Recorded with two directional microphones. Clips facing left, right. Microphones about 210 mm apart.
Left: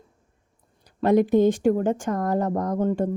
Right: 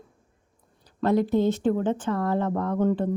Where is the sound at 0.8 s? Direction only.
15° left (ahead or behind).